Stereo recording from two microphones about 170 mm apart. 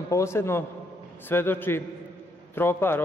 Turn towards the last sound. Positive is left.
turn(degrees=15)  # may be behind; listen again after turning